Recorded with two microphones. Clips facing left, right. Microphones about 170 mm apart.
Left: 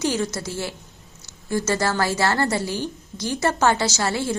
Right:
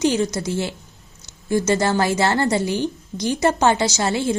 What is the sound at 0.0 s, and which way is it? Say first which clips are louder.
A woman's voice: right 4 dB; 20° right (ahead or behind).